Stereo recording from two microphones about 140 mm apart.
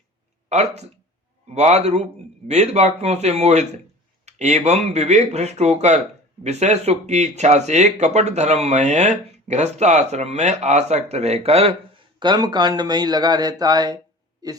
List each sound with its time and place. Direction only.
0.4 s speech: 50° right (ahead or behind)
12.2 s speech: 30° right (ahead or behind)